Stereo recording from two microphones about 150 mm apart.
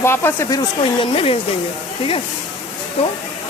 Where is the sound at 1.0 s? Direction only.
40° left (ahead or behind).